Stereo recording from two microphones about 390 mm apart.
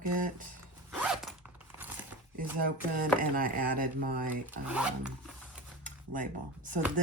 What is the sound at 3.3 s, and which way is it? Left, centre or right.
Speech, right.